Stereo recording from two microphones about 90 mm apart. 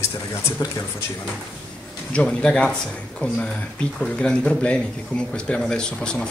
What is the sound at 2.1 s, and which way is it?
Speech, 10° left (ahead or behind).